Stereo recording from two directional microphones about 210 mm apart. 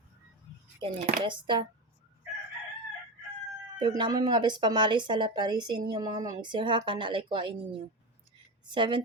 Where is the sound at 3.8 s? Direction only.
20° right (ahead or behind).